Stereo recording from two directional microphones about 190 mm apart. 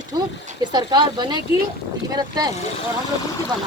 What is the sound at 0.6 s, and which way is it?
Speech, 20° right (ahead or behind).